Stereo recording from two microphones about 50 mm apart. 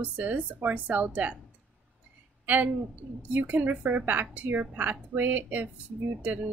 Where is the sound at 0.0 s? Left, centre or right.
Right.